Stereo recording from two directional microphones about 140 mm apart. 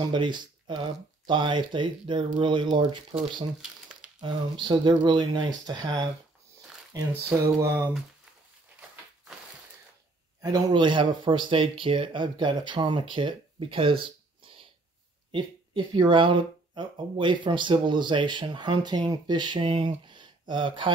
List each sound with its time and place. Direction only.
0.0 s speech: 35° right (ahead or behind)
4.2 s speech: 35° right (ahead or behind)
7.3 s a sound: 20° right (ahead or behind)
10.4 s speech: 30° right (ahead or behind)